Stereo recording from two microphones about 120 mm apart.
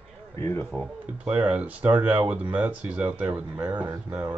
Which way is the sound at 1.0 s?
10° right (ahead or behind).